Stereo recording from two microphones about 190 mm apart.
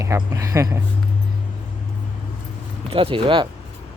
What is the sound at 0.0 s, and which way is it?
Speech, 15° right (ahead or behind).